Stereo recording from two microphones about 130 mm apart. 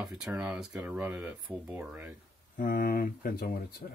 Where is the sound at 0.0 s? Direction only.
5° right (ahead or behind).